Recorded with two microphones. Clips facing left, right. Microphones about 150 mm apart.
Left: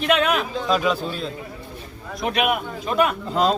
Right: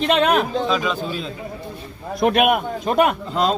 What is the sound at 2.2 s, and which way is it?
Speech, 50° right (ahead or behind).